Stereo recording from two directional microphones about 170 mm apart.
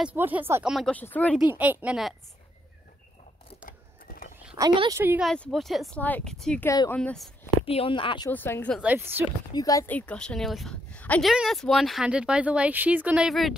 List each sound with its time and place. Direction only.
0.0 s speech: 10° right (ahead or behind)
0.7 s a woman's voice: 5° left (ahead or behind)
1.5 s speech: 10° right (ahead or behind)
4.6 s speech: 25° right (ahead or behind)
5.0 s speech: 10° right (ahead or behind)
5.3 s speech: 5° left (ahead or behind)
6.6 s a woman's voice: 15° left (ahead or behind)
7.0 s speech: 5° left (ahead or behind)
7.6 s speech: 35° left (ahead or behind)
8.3 s a woman's voice: 10° left (ahead or behind)
8.8 s speech: 10° right (ahead or behind)
9.5 s a woman's voice: 20° left (ahead or behind); by 13.6 s centre (ahead or behind)